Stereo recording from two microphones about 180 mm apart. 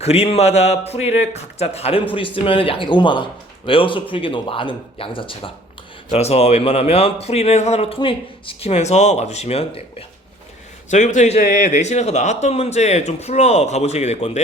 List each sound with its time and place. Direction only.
0.0 s speech: 35° left (ahead or behind)
10.9 s speech: 40° left (ahead or behind)